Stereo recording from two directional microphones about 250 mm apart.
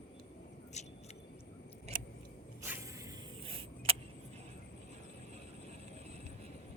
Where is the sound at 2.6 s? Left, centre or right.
Centre.